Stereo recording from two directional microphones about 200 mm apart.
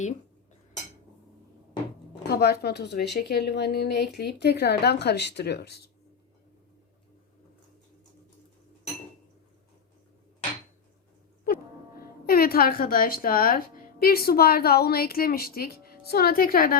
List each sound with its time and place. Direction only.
2.2 s speech: 55° left (ahead or behind)
12.2 s speech: 50° left (ahead or behind)